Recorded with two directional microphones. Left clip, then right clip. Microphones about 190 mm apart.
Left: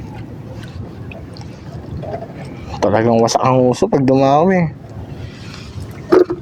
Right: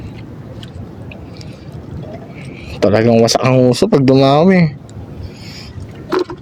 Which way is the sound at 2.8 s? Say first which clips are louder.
Right 2 dB; 65° right (ahead or behind).